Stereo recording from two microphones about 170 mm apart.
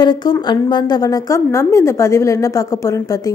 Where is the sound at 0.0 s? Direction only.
25° left (ahead or behind).